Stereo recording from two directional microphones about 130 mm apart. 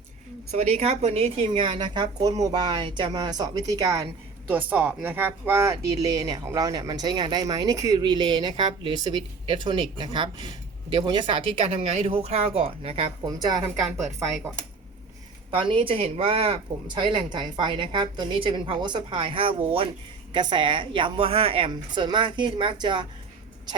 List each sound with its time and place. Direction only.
0.5 s speech: 55° right (ahead or behind); by 4.0 s 25° right (ahead or behind)
4.4 s speech: 10° right (ahead or behind); by 13.1 s 50° right (ahead or behind)
13.2 s speech: 30° right (ahead or behind)
13.8 s a woman's voice: centre (ahead or behind)
15.4 s speech: 40° right (ahead or behind)